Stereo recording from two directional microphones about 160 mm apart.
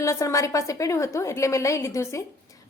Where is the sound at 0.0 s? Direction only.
20° left (ahead or behind).